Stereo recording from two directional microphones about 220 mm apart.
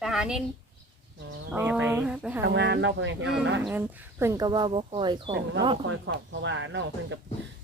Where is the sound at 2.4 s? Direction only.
50° right (ahead or behind).